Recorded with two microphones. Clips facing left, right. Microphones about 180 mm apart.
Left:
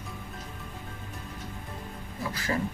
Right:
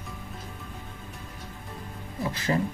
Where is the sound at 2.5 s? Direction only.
20° right (ahead or behind).